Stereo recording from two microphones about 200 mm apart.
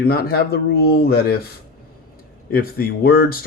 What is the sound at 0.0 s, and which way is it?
Speech, 50° left (ahead or behind).